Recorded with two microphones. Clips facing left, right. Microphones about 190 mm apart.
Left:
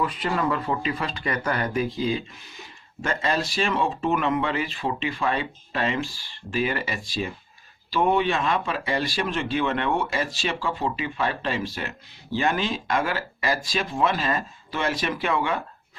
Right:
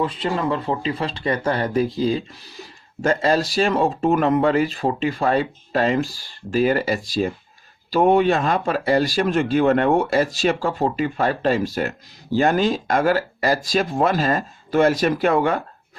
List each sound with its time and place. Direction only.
0.0 s speech: 30° right (ahead or behind); by 15.6 s 45° right (ahead or behind)